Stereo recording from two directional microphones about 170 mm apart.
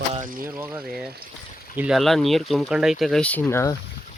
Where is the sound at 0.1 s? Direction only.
45° right (ahead or behind).